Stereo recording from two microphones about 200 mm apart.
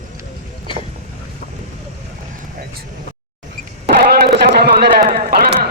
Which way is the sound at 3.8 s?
55° right (ahead or behind).